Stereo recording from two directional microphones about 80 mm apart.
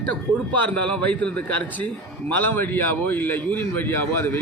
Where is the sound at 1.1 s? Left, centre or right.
Centre.